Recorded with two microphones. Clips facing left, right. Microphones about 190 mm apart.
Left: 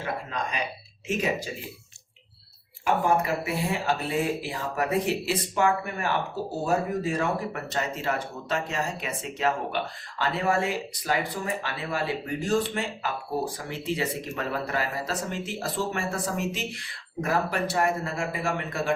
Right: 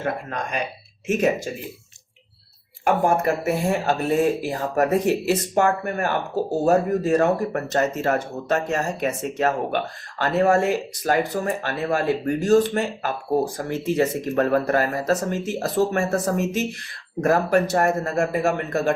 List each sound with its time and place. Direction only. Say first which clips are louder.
0.0 s speech: right 4 dB; 55° right (ahead or behind)
2.8 s speech: right 5 dB; 50° right (ahead or behind)